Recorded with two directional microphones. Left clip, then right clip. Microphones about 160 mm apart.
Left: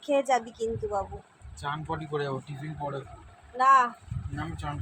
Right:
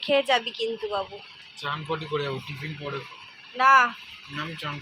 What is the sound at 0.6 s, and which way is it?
Speech, centre (ahead or behind).